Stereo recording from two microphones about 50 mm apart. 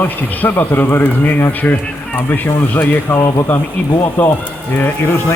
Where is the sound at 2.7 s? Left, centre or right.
Left.